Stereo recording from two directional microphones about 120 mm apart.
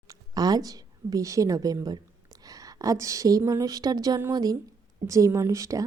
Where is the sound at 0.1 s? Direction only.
30° right (ahead or behind).